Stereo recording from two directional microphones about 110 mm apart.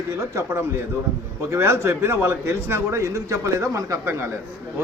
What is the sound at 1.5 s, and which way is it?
A man's voice, 25° right (ahead or behind).